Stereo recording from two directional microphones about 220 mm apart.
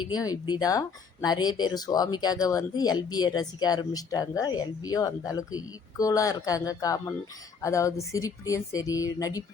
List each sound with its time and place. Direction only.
0.0 s speech: 20° left (ahead or behind)